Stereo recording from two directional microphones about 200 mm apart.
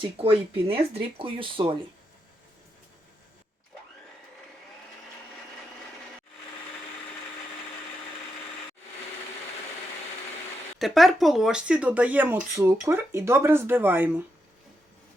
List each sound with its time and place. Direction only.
0.0 s speech: 30° right (ahead or behind)
10.8 s speech: centre (ahead or behind)